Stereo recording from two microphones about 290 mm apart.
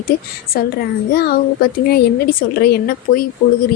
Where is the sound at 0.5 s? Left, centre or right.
Left.